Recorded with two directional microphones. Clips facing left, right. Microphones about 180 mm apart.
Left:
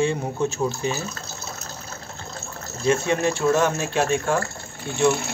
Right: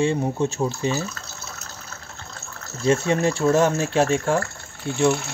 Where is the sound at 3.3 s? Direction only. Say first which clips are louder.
Right 2 dB; 35° right (ahead or behind).